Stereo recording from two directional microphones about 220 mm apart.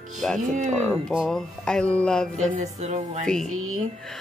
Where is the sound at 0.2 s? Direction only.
Centre (ahead or behind).